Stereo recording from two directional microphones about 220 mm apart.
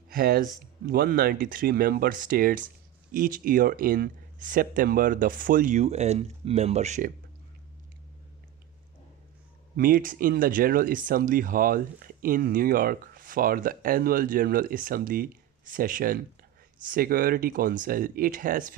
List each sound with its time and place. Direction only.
0.1 s speech: 40° right (ahead or behind)
9.7 s speech: 40° right (ahead or behind)